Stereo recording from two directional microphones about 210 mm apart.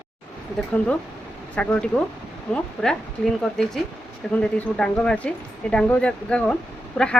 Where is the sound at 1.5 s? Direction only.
5° left (ahead or behind).